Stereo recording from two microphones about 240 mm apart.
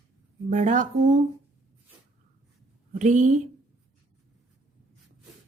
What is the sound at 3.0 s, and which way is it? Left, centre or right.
Speech, right.